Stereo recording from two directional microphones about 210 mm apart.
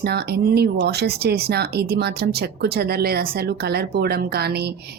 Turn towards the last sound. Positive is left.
turn(degrees=-50)  # may be behind; listen again after turning